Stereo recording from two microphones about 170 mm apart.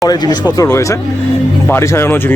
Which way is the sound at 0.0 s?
20° left (ahead or behind).